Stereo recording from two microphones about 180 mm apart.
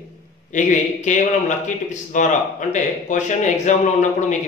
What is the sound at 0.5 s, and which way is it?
A man's voice, 45° left (ahead or behind).